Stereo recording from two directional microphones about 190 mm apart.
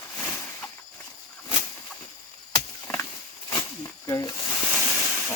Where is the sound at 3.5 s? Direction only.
20° left (ahead or behind).